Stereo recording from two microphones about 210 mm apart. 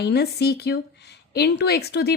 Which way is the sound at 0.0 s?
50° left (ahead or behind).